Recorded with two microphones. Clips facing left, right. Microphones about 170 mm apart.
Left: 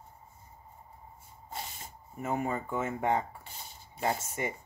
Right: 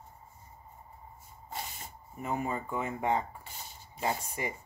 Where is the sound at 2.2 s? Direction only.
50° left (ahead or behind).